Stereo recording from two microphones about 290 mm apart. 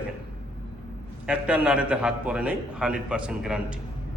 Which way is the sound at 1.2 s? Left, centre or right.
Centre.